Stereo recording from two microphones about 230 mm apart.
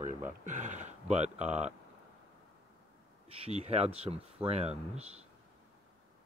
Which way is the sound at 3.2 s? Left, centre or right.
Right.